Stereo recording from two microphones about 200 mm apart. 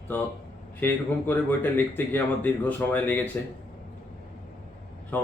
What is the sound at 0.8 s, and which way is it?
A man's voice, 10° left (ahead or behind).